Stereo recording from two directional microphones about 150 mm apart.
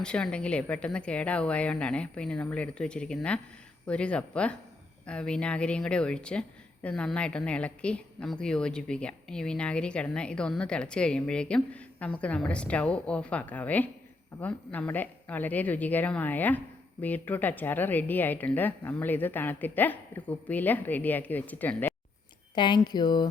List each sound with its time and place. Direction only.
0.0 s a woman's voice: 5° left (ahead or behind)
22.5 s speech: 30° left (ahead or behind)